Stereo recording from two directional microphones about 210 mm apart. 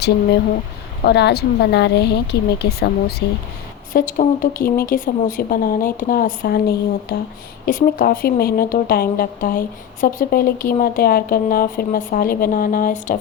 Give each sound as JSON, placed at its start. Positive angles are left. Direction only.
{"t": 1.0, "sound": "speech", "side_deg": 50}